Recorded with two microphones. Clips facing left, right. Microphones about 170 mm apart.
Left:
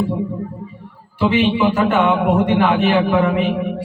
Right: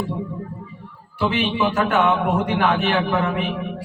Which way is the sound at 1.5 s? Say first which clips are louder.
Left 5 dB; 15° left (ahead or behind).